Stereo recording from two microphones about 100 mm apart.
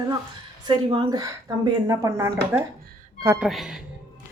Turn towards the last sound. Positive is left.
turn(degrees=-5)  # may be behind; listen again after turning